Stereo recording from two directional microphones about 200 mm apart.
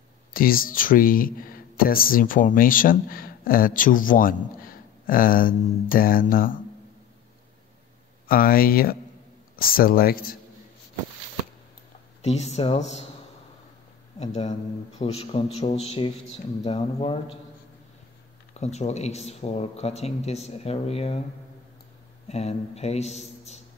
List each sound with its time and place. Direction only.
0.3 s speech: 45° left (ahead or behind)
8.3 s speech: 45° left (ahead or behind)
12.2 s speech: 35° left (ahead or behind)
14.2 s speech: 35° left (ahead or behind)
18.5 s speech: 35° left (ahead or behind)
22.3 s speech: 30° left (ahead or behind)